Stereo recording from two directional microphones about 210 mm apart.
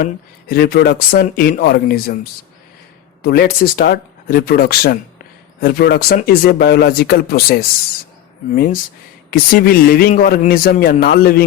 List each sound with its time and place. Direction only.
0.0 s speech: 45° left (ahead or behind)
3.2 s speech: 45° left (ahead or behind)